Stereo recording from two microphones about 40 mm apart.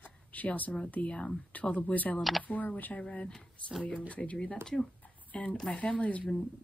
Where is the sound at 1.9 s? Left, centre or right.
Left.